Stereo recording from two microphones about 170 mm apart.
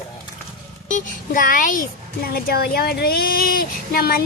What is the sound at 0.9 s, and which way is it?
Speech, 50° left (ahead or behind).